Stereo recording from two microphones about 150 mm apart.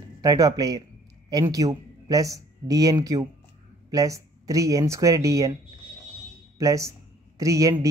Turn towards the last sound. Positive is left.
turn(degrees=-20)  # may be behind; listen again after turning